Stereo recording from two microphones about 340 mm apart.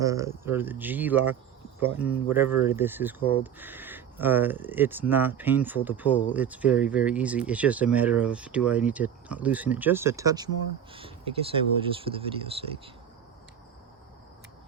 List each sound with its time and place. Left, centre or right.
0.0 s speech: centre